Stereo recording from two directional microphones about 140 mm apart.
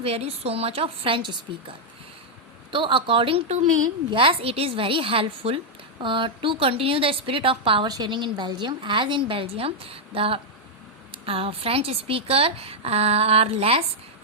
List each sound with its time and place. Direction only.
0.0 s a woman's voice: 45° right (ahead or behind)
2.7 s a woman's voice: 35° right (ahead or behind)